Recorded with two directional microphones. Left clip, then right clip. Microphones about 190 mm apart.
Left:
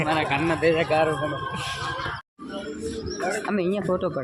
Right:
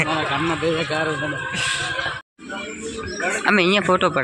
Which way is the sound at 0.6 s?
45° right (ahead or behind).